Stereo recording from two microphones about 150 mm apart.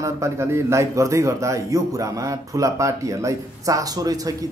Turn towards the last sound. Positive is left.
turn(degrees=-25)  # may be behind; listen again after turning